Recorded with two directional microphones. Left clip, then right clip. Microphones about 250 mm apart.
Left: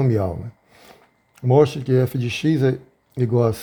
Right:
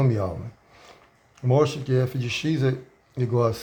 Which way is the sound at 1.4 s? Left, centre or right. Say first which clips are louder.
Left 5 dB; left.